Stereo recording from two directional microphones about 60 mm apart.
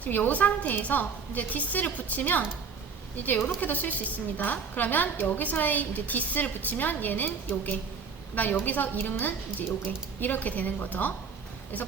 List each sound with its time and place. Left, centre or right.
0.0 s a woman's voice: left